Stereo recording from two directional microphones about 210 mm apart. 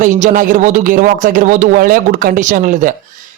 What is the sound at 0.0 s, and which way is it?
Speech, 35° right (ahead or behind).